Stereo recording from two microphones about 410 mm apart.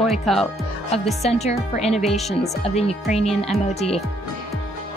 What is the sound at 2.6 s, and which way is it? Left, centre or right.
Speech, centre.